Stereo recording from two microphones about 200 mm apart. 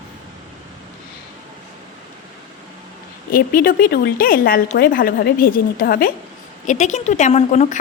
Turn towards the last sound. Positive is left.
turn(degrees=30)  # may be behind; listen again after turning